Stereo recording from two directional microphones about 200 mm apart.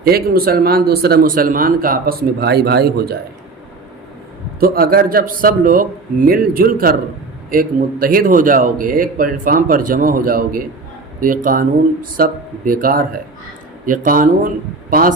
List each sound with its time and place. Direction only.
0.0 s a man's voice: 50° right (ahead or behind)
4.6 s a man's voice: 45° right (ahead or behind)